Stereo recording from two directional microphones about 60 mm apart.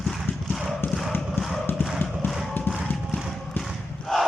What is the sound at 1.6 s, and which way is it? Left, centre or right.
Clip-clop, left.